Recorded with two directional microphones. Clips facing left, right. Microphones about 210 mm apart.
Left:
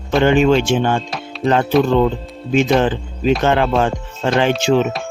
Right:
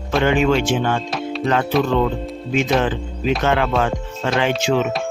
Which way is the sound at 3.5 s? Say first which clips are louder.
Left 3 dB; 30° left (ahead or behind).